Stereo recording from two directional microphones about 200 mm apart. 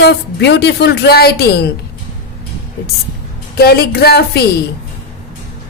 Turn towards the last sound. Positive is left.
turn(degrees=55)  # may be behind; listen again after turning